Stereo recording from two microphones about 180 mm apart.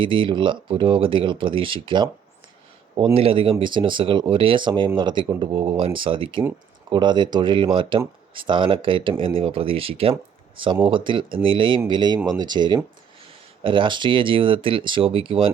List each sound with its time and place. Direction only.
0.0 s speech: 30° right (ahead or behind)